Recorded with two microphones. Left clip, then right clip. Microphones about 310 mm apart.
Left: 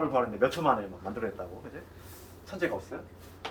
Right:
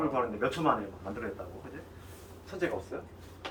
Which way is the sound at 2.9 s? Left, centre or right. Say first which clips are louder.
Right 1 dB; centre.